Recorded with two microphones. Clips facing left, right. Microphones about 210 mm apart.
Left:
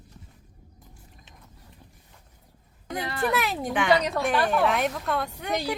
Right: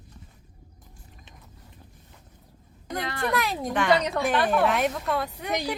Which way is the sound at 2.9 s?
Centre (ahead or behind).